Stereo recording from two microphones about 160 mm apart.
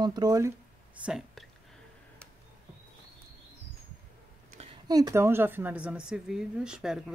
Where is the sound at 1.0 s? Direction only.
5° right (ahead or behind).